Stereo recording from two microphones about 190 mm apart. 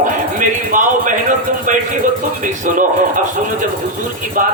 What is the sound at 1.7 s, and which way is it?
Music, 45° right (ahead or behind).